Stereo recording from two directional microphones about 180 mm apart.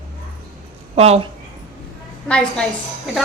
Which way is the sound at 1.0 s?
35° right (ahead or behind).